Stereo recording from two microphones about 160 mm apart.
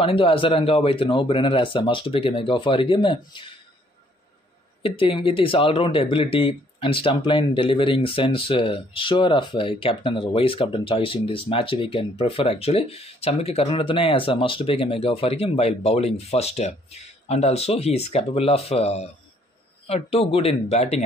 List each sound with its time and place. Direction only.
0.0 s speech: 35° left (ahead or behind)
4.8 s speech: 35° left (ahead or behind)